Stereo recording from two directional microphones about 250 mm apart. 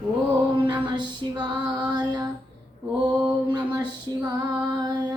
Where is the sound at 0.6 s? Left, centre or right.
Centre.